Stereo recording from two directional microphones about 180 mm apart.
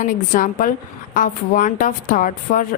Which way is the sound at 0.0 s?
45° left (ahead or behind).